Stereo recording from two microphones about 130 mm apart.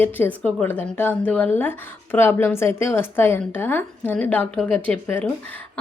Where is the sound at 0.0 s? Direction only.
15° left (ahead or behind).